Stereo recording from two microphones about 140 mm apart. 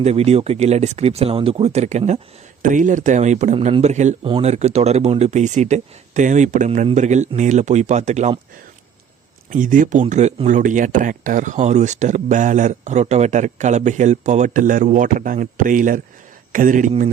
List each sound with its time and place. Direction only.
0.0 s speech: 50° right (ahead or behind)
2.6 s speech: 65° right (ahead or behind)
9.5 s speech: 70° right (ahead or behind)
10.1 s speech: 55° right (ahead or behind)